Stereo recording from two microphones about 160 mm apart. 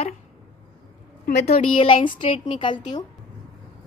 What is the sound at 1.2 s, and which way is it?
A woman's voice, 45° left (ahead or behind).